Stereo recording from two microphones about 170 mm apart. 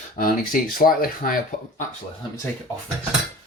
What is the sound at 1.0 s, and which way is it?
Speech, 55° left (ahead or behind).